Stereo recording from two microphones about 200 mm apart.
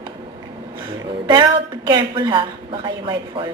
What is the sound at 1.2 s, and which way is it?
A woman's voice, 25° right (ahead or behind).